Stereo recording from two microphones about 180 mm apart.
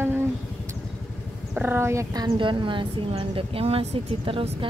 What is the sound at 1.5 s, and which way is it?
A woman's voice, 10° right (ahead or behind).